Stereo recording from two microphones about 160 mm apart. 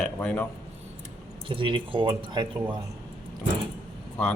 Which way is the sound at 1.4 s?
35° right (ahead or behind).